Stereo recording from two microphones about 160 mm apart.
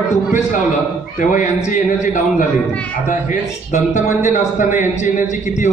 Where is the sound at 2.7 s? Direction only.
10° left (ahead or behind).